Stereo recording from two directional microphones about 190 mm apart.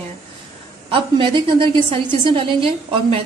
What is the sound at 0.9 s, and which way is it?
A woman's voice, 25° right (ahead or behind).